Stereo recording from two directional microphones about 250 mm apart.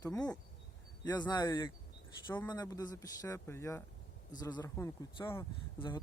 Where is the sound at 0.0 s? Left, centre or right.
Centre.